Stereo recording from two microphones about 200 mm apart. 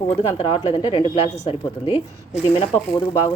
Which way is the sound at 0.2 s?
30° left (ahead or behind).